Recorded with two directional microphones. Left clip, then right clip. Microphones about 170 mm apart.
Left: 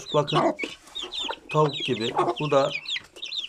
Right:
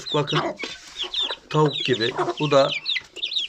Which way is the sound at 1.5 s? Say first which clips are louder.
Right 3 dB; 5° left (ahead or behind).